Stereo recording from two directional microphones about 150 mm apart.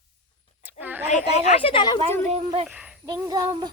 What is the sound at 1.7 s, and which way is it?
Speech, 30° left (ahead or behind).